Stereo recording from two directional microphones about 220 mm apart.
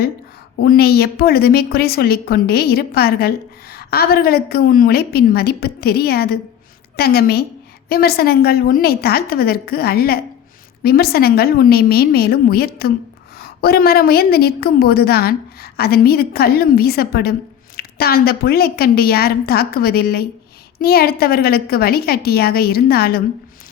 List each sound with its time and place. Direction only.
0.6 s a woman's voice: 45° left (ahead or behind)